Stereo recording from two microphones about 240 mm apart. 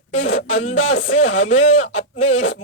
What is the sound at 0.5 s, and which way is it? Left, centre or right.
Speech, left.